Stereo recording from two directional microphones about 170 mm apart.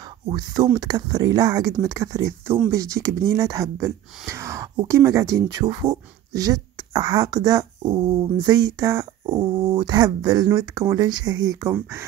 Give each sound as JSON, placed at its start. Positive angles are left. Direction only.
{"t": 0.3, "sound": "speech", "side_deg": -25}